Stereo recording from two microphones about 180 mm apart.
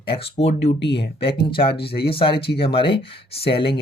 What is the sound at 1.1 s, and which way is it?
Speech, 30° left (ahead or behind).